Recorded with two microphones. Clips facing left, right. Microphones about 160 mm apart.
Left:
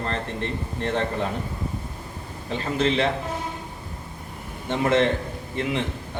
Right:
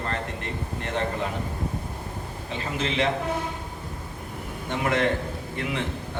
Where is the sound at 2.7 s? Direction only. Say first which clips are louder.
Left 4 dB; 35° left (ahead or behind).